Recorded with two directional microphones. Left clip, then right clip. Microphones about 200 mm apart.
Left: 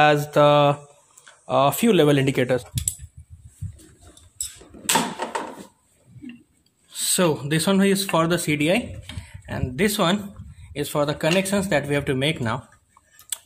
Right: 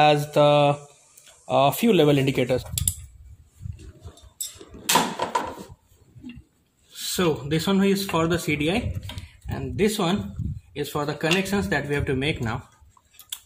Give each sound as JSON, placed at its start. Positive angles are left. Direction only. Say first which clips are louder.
{"t": 0.0, "sound": "speech", "louder": "left 1 dB", "side_deg": 10}
{"t": 6.9, "sound": "speech", "louder": "left 3 dB", "side_deg": 55}